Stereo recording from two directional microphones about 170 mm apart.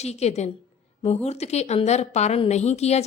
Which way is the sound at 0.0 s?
40° left (ahead or behind).